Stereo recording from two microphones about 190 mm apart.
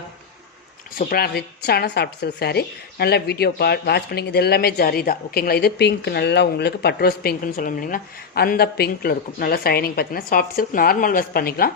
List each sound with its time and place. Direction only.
0.9 s speech: 50° left (ahead or behind)